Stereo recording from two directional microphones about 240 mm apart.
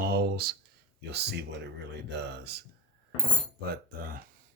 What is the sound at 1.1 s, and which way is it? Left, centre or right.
Speech, right.